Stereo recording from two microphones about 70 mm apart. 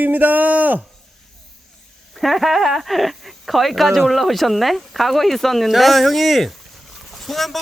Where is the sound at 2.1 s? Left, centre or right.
Centre.